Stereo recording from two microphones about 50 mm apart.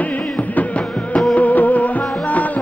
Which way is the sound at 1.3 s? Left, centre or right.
Left.